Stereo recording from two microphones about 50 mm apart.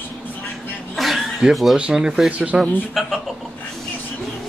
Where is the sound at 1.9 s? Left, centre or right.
Centre.